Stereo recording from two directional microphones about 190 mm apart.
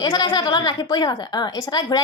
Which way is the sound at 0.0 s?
20° left (ahead or behind).